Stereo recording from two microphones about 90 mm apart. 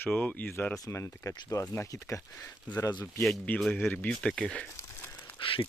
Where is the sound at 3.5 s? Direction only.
20° left (ahead or behind).